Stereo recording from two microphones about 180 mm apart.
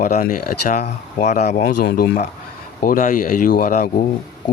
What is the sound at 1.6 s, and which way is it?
Speech, 55° left (ahead or behind).